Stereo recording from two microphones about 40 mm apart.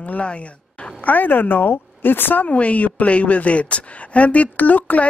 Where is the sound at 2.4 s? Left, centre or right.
Left.